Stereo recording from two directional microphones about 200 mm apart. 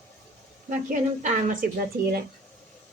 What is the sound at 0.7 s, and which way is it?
Speech, 40° right (ahead or behind).